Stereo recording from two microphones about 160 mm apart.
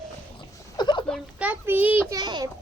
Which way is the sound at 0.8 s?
30° left (ahead or behind).